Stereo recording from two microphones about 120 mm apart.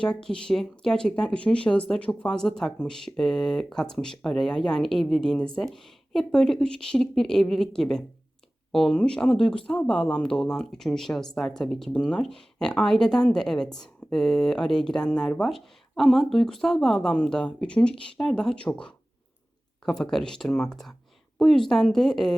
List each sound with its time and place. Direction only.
0.0 s speech: 5° left (ahead or behind)